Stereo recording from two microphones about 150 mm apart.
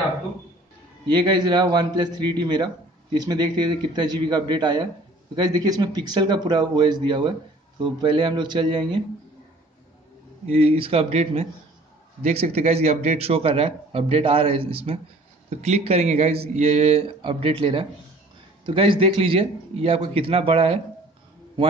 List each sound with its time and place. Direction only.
1.0 s a man's voice: 30° right (ahead or behind)
10.4 s a man's voice: 40° right (ahead or behind)